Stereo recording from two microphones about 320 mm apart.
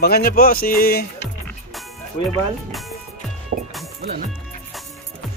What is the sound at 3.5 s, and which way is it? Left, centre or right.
Music, right.